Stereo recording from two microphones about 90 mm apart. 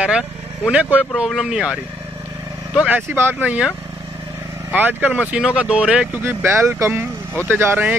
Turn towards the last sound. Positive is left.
turn(degrees=-25)  # may be behind; listen again after turning